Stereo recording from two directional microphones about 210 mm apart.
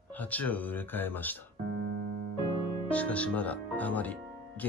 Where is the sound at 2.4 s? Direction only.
25° left (ahead or behind).